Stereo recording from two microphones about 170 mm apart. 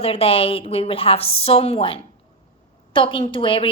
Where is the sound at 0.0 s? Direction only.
35° left (ahead or behind).